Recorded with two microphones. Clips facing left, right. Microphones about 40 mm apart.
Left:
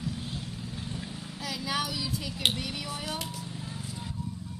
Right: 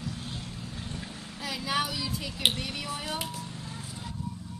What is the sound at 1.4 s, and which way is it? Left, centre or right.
Speech, centre.